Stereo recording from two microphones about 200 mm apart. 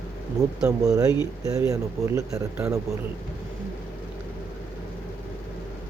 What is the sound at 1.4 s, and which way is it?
Speech, 15° right (ahead or behind).